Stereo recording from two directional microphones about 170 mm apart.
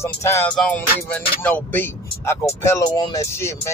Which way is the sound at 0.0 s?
15° left (ahead or behind).